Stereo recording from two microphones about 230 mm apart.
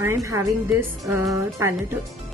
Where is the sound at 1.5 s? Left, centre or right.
Centre.